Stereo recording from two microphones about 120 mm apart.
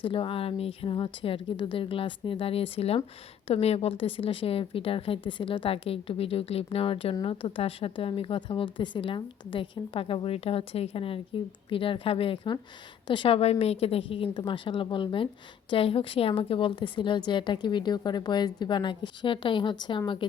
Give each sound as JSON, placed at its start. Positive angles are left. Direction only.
{"t": 0.0, "sound": "a woman's voice", "side_deg": 45}